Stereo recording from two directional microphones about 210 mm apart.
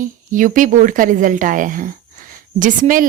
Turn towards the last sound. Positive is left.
turn(degrees=-40)  # may be behind; listen again after turning